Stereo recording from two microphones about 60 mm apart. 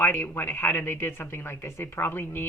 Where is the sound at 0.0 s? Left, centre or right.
Left.